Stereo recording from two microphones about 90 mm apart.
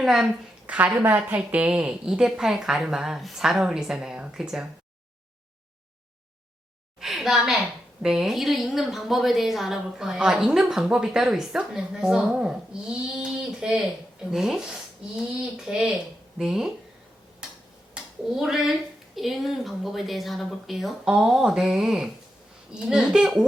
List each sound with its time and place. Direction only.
0.0 s a woman's voice: 5° right (ahead or behind)
0.9 s a woman's voice: 20° right (ahead or behind)
7.0 s a sound: centre (ahead or behind)
8.0 s a woman's voice: 5° right (ahead or behind)
17.9 s a woman's voice: 5° right (ahead or behind)